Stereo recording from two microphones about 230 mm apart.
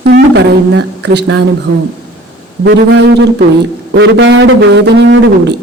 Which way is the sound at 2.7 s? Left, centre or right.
Right.